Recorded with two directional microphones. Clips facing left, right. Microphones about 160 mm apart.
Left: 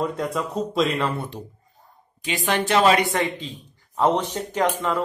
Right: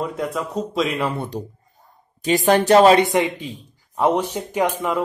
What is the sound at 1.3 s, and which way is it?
Speech, 40° right (ahead or behind).